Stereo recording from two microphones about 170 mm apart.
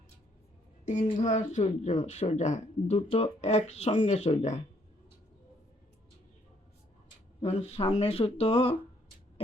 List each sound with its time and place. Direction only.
0.9 s speech: 45° left (ahead or behind)
7.4 s speech: 35° left (ahead or behind)